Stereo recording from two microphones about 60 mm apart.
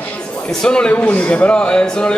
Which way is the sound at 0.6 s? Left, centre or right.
Centre.